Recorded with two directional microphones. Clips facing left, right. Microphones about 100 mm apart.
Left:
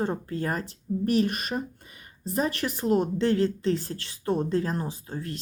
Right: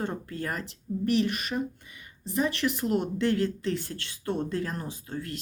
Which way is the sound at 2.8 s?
30° left (ahead or behind).